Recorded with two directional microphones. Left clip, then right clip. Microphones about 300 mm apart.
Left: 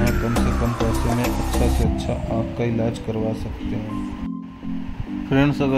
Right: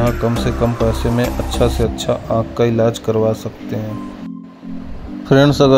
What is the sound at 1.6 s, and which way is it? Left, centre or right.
A man's voice, centre.